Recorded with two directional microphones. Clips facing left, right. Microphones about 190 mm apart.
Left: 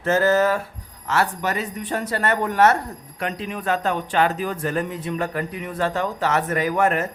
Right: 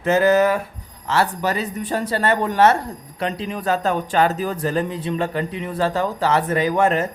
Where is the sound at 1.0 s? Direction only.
30° right (ahead or behind).